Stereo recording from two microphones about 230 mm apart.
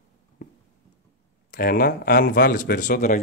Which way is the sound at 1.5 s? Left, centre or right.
Left.